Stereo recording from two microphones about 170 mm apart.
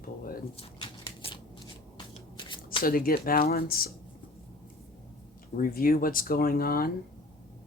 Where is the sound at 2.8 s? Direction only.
60° left (ahead or behind).